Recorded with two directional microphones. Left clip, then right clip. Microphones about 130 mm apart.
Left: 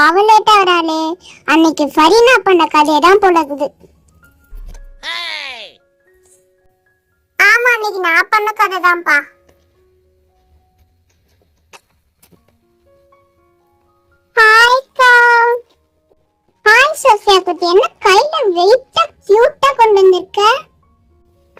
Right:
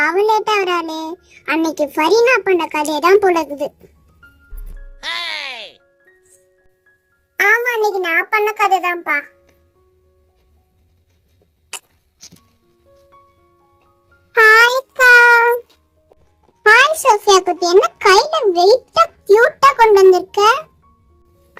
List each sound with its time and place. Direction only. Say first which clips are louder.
0.0 s speech: left 6 dB; 30° left (ahead or behind); by 3.7 s 15° left (ahead or behind)
4.9 s music: left 1 dB; centre (ahead or behind)
8.0 s a child's voice: left 4 dB; 40° left (ahead or behind)
14.3 s a sound: left 2 dB; 5° left (ahead or behind)
16.6 s a child's voice: left 2 dB; centre (ahead or behind)